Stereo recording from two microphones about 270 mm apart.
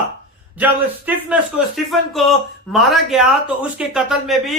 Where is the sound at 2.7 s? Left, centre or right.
Centre.